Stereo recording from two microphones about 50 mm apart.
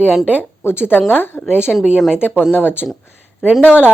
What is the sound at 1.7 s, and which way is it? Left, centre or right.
Speech, centre.